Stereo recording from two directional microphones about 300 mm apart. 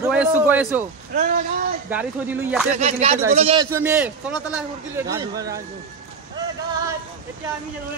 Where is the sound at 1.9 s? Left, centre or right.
Centre.